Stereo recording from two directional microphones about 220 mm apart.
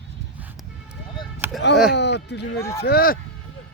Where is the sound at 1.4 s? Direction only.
10° right (ahead or behind).